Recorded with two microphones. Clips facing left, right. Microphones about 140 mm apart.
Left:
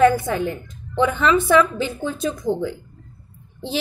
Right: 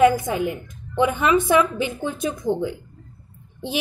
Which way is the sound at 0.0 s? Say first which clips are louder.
Left 1 dB; 15° right (ahead or behind).